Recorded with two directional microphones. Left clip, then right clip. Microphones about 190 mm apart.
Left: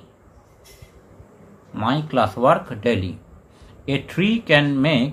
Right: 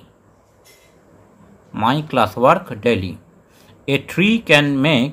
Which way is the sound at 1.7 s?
30° right (ahead or behind).